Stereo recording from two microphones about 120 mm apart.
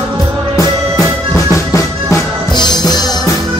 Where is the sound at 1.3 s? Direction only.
25° left (ahead or behind).